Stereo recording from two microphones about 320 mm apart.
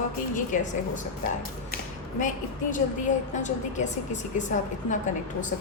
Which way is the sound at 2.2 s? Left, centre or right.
Left.